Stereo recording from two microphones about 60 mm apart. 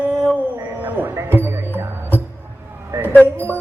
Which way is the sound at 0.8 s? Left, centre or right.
Right.